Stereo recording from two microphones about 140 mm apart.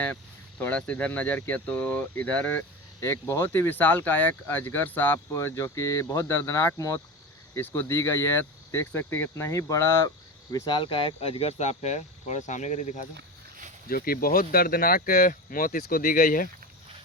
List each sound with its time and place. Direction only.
0.6 s speech: 10° left (ahead or behind)
10.5 s speech: 30° left (ahead or behind); by 13.1 s 60° left (ahead or behind)
13.9 s speech: 90° left